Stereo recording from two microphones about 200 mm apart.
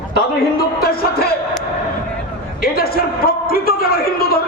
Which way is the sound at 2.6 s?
50° left (ahead or behind).